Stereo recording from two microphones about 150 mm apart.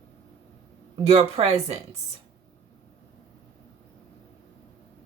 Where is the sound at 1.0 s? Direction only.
45° right (ahead or behind).